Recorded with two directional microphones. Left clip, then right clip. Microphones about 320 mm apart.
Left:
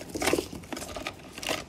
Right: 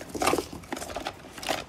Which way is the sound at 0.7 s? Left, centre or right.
Centre.